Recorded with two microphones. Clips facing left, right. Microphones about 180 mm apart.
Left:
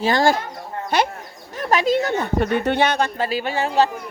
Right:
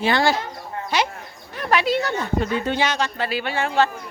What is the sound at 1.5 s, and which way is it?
Speech, 40° left (ahead or behind).